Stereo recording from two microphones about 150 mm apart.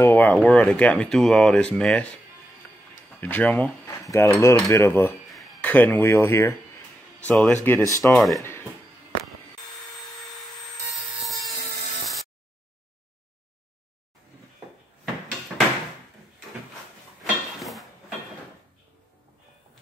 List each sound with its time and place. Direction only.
0.0 s speech: 10° left (ahead or behind)
3.2 s speech: 10° left (ahead or behind)
5.3 s a sound: centre (ahead or behind)
5.6 s speech: 10° left (ahead or behind)
7.2 s speech: 5° left (ahead or behind)
7.6 s speech: 15° left (ahead or behind)
8.1 s speech: centre (ahead or behind)
11.2 s helicopter: centre (ahead or behind)
17.2 s a sound: centre (ahead or behind)